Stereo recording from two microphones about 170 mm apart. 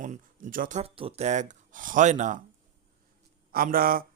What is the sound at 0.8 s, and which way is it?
Speech, 35° right (ahead or behind).